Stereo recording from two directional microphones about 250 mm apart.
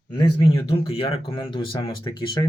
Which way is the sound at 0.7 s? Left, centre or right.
Left.